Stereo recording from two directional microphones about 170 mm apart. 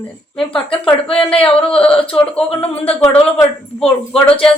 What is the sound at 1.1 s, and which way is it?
Speech, 30° left (ahead or behind).